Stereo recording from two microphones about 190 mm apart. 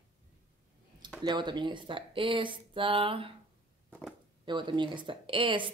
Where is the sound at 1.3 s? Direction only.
25° right (ahead or behind).